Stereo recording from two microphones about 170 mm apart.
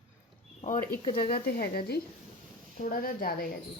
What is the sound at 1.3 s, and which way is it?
A woman's voice, 65° left (ahead or behind).